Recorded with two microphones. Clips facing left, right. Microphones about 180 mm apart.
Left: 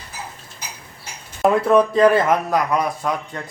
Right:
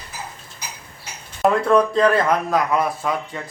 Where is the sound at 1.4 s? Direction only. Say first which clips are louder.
Left 1 dB; 5° left (ahead or behind).